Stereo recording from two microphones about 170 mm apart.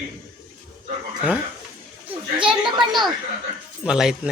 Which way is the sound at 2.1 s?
30° right (ahead or behind).